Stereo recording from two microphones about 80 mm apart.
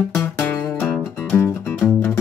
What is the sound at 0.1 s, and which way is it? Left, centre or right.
Music, left.